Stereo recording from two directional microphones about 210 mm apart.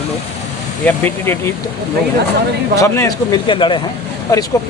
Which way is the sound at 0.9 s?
10° left (ahead or behind).